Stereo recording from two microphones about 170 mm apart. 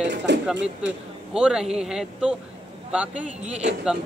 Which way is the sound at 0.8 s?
5° right (ahead or behind).